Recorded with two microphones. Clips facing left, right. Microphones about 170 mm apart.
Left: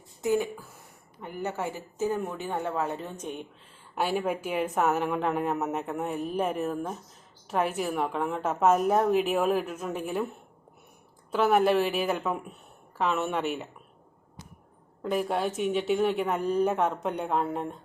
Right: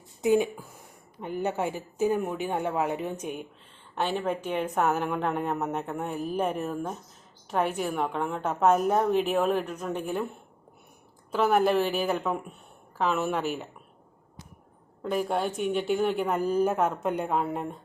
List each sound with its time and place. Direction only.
0.2 s a woman's voice: 20° right (ahead or behind)
3.9 s speech: 10° left (ahead or behind)
11.3 s speech: centre (ahead or behind)
15.0 s speech: centre (ahead or behind)